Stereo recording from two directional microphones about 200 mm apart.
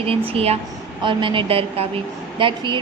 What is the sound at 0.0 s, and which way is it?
Speech, 30° right (ahead or behind).